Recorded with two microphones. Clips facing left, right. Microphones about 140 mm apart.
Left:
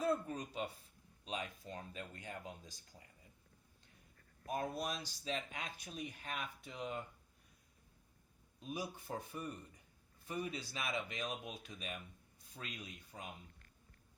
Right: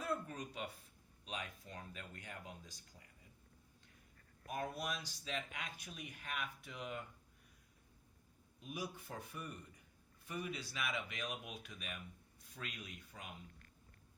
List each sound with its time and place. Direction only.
0.0 s a sound: 25° left (ahead or behind)
1.2 s speech: 25° left (ahead or behind)
4.4 s speech: 30° left (ahead or behind)
8.6 s speech: 30° left (ahead or behind)